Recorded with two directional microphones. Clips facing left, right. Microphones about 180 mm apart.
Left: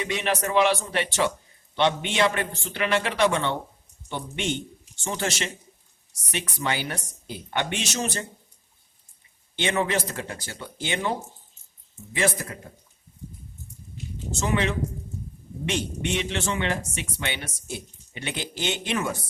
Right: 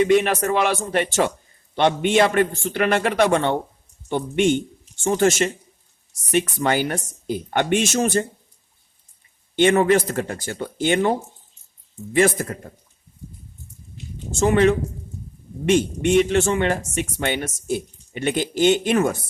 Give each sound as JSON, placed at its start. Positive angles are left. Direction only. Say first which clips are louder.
{"t": 0.0, "sound": "speech", "louder": "right 10 dB", "side_deg": -50}
{"t": 9.6, "sound": "speech", "louder": "right 9 dB", "side_deg": -50}
{"t": 14.3, "sound": "speech", "louder": "right 9 dB", "side_deg": -50}